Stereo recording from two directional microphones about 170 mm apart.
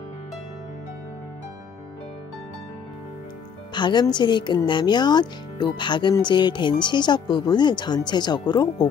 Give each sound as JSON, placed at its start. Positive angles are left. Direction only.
{"t": 3.7, "sound": "a woman's voice", "side_deg": 25}